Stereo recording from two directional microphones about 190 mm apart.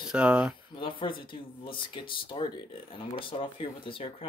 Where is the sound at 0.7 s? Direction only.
25° left (ahead or behind).